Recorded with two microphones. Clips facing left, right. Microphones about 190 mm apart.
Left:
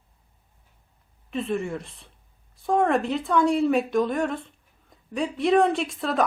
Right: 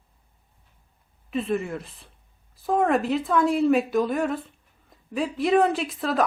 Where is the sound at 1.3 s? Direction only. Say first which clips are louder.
Right 1 dB; centre (ahead or behind).